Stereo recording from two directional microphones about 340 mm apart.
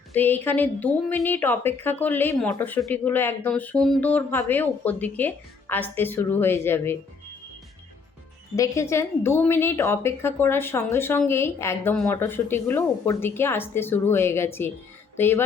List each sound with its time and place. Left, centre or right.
0.2 s a woman's voice: centre
8.5 s a woman's voice: centre